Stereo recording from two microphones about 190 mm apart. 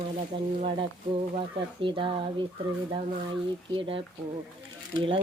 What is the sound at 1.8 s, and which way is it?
Speech, 25° right (ahead or behind).